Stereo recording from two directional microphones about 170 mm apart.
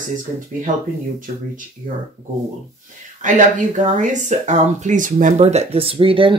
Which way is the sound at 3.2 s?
50° right (ahead or behind).